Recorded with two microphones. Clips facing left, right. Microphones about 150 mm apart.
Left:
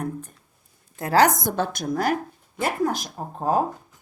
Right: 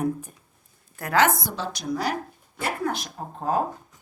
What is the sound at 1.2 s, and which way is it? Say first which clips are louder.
A woman's voice: left 3 dB; 45° left (ahead or behind).